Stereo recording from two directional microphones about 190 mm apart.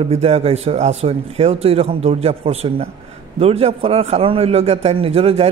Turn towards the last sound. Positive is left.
turn(degrees=-30)  # may be behind; listen again after turning